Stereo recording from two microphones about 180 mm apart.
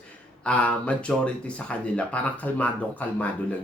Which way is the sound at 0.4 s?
5° left (ahead or behind).